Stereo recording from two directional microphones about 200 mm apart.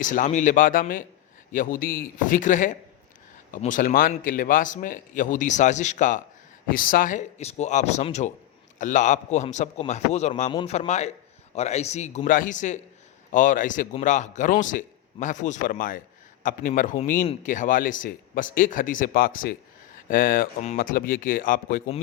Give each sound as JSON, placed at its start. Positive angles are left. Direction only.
{"t": 0.0, "sound": "speech", "side_deg": 40}